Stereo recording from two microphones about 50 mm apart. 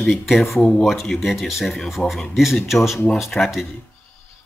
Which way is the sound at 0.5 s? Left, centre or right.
Left.